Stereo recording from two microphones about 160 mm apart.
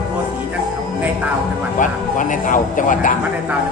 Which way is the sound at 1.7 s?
55° left (ahead or behind).